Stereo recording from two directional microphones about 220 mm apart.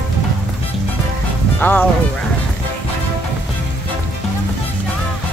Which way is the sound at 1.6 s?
10° left (ahead or behind).